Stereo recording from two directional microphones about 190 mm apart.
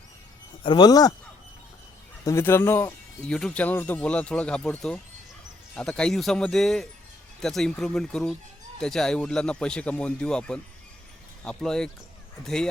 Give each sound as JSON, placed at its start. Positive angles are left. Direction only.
{"t": 0.6, "sound": "speech", "side_deg": 25}
{"t": 2.2, "sound": "speech", "side_deg": 15}